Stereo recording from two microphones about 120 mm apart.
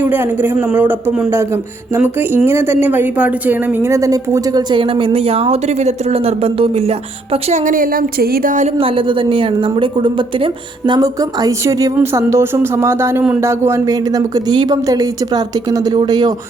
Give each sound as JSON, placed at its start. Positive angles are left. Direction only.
{"t": 0.0, "sound": "a woman's voice", "side_deg": -15}
{"t": 4.7, "sound": "a woman's voice", "side_deg": -45}
{"t": 8.8, "sound": "a woman's voice", "side_deg": -50}